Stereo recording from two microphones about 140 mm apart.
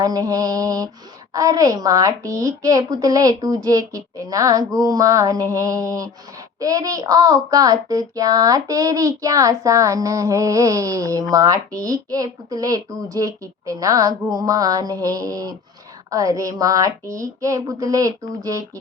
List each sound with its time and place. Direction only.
0.0 s child singing: 25° right (ahead or behind)